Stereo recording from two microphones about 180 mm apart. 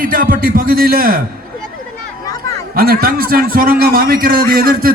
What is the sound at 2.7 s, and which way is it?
A man's voice, 55° right (ahead or behind).